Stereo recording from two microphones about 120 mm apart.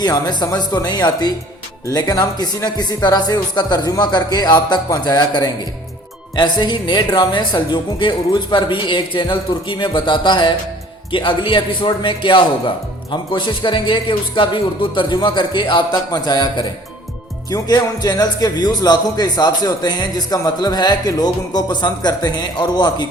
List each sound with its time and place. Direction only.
0.0 s a man's voice: 35° left (ahead or behind)